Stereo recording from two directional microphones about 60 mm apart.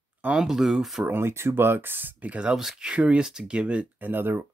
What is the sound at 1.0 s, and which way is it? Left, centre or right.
Speech, right.